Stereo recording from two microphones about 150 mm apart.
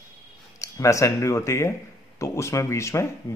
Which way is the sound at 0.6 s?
20° left (ahead or behind).